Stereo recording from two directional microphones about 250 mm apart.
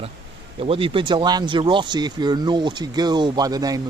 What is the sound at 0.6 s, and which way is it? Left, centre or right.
Speech, right.